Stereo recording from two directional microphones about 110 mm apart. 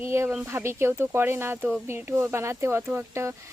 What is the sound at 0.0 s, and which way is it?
Speech, 20° right (ahead or behind).